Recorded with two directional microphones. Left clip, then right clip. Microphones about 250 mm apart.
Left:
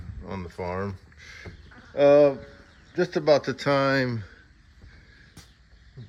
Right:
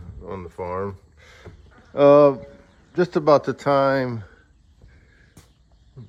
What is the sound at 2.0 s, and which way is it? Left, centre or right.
Speech, centre.